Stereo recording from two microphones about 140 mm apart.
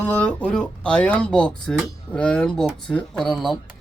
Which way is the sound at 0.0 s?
10° left (ahead or behind).